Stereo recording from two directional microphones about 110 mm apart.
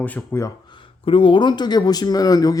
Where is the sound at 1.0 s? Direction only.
55° left (ahead or behind); by 2.5 s 35° left (ahead or behind).